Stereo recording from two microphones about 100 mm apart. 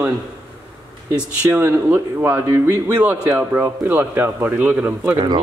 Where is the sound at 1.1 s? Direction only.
20° right (ahead or behind).